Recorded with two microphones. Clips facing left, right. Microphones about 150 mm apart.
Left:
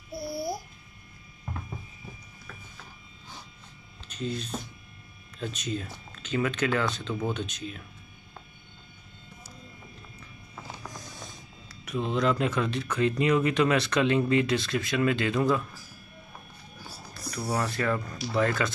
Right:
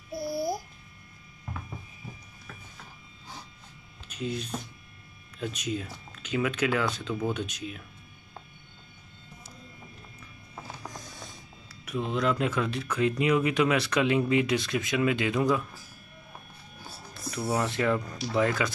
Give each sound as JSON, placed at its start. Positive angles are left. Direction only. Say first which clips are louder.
{"t": 0.1, "sound": "babbling", "louder": "right 2 dB", "side_deg": -20}
{"t": 4.1, "sound": "speech", "louder": "even", "side_deg": -10}
{"t": 11.7, "sound": "speech", "louder": "left 1 dB", "side_deg": -5}
{"t": 17.1, "sound": "a sound", "louder": "right 2 dB", "side_deg": -25}
{"t": 17.5, "sound": "speech", "louder": "right 2 dB", "side_deg": -20}